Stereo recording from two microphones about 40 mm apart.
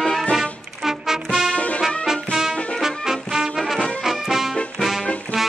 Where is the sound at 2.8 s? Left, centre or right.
Centre.